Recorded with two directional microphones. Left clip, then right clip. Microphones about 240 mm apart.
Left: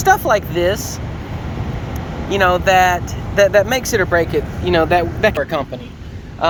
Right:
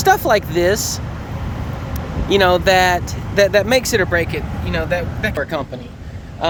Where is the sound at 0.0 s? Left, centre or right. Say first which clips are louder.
Even; right.